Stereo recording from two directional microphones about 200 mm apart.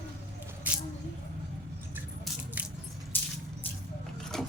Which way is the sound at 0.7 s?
10° right (ahead or behind).